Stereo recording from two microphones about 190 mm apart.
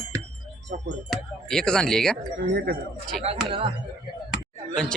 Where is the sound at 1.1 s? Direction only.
5° left (ahead or behind).